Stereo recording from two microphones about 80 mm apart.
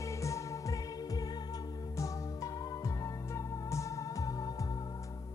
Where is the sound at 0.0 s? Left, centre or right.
Left.